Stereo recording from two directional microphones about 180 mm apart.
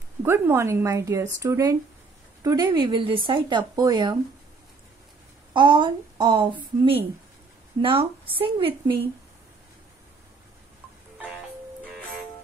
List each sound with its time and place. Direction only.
0.2 s a woman's voice: 15° right (ahead or behind)
5.5 s a woman's voice: 25° right (ahead or behind)